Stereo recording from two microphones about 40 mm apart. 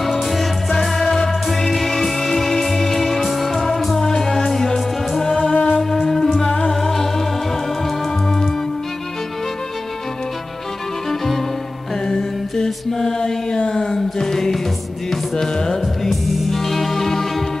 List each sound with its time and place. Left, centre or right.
0.0 s music: centre
5.5 s music: left
6.0 s music: centre
11.1 s music: centre
12.1 s mantra: centre
13.7 s a sound: left
13.9 s mantra: centre
15.0 s music: centre